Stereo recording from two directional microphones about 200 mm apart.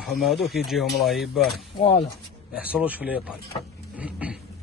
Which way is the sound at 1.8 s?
30° left (ahead or behind).